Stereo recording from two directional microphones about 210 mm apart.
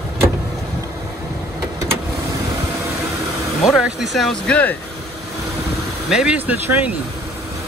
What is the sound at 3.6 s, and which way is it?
Speech, centre (ahead or behind).